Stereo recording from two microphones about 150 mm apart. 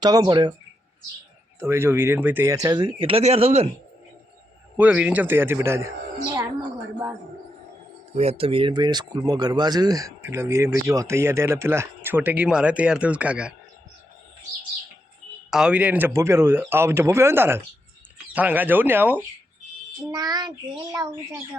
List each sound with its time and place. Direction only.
0.0 s speech: 25° right (ahead or behind)
1.5 s speech: 15° right (ahead or behind); by 3.7 s 45° right (ahead or behind)
4.8 s speech: 10° right (ahead or behind)
8.1 s speech: 45° right (ahead or behind); by 13.5 s 10° right (ahead or behind)
15.4 s speech: 5° right (ahead or behind)
20.1 s speech: 25° right (ahead or behind)